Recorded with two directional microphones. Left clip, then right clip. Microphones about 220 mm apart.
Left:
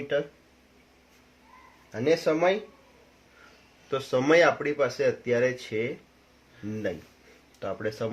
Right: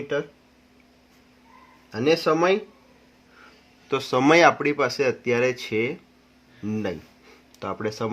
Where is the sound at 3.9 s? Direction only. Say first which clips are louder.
Right 4 dB; 50° right (ahead or behind).